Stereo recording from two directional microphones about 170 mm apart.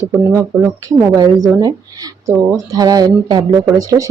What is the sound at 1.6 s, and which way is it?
Speech, 20° right (ahead or behind).